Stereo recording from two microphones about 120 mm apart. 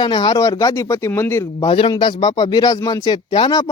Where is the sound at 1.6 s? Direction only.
50° left (ahead or behind).